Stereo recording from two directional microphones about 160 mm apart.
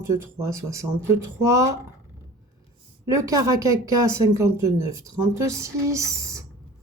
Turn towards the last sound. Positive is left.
turn(degrees=-20)  # may be behind; listen again after turning